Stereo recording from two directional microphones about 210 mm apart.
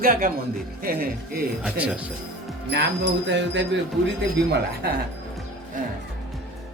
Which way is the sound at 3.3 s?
60° right (ahead or behind).